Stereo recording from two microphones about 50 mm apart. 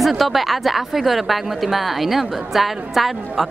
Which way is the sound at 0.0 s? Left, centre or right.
Centre.